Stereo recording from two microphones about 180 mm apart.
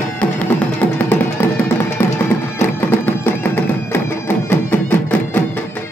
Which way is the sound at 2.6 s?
10° left (ahead or behind).